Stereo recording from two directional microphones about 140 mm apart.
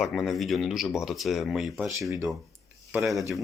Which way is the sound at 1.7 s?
15° right (ahead or behind).